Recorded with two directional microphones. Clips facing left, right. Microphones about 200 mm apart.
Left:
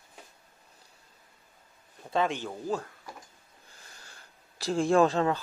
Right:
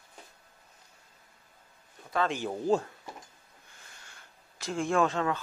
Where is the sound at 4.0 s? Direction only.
35° left (ahead or behind).